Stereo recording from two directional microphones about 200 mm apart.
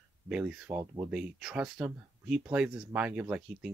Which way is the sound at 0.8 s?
20° right (ahead or behind).